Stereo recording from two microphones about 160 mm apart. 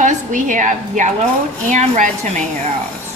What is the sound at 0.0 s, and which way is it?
A woman's voice, 50° right (ahead or behind).